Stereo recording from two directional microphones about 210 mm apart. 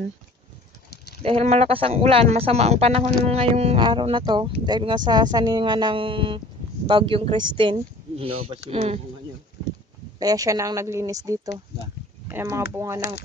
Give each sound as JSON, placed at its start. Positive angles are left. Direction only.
{"t": 1.2, "sound": "speech", "side_deg": -30}
{"t": 10.1, "sound": "speech", "side_deg": -20}